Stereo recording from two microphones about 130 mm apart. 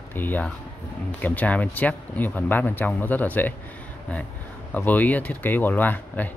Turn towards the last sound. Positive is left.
turn(degrees=15)  # may be behind; listen again after turning